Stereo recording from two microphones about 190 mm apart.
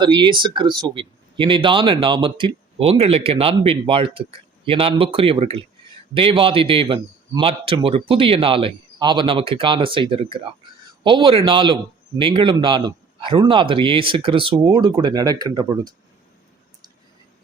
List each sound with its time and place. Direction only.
0.0 s speech: 25° right (ahead or behind)